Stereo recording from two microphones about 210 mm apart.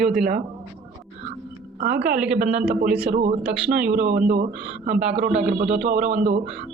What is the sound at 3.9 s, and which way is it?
Speech, 40° right (ahead or behind).